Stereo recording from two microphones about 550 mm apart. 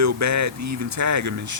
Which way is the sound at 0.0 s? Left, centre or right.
Right.